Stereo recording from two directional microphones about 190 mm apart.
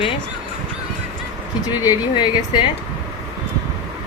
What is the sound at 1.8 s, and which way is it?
Speech, 25° left (ahead or behind).